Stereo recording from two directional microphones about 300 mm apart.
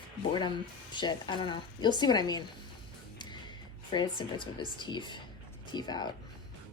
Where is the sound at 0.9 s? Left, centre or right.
Centre.